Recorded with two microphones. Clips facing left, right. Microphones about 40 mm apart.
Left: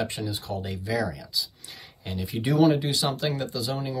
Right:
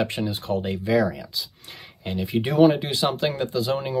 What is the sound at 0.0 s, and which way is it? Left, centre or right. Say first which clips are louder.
Speech: right 5 dB; right.